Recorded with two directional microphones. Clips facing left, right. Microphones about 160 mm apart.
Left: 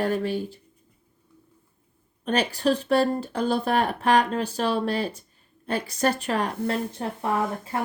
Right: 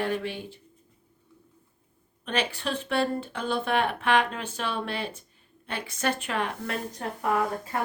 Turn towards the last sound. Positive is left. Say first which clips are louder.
# left 1 dB
turn(degrees=30)  # may be behind; listen again after turning